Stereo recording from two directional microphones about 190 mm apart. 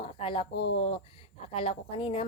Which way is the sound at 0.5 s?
70° left (ahead or behind).